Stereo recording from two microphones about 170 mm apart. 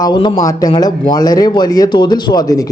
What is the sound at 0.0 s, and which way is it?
Speech, 25° left (ahead or behind).